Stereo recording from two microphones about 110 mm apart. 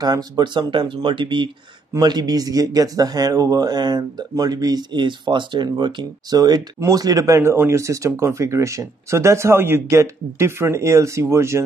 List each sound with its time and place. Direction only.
0.0 s speech: 35° right (ahead or behind)